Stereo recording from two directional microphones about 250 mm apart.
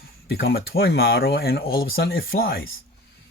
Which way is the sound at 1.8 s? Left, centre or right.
Left.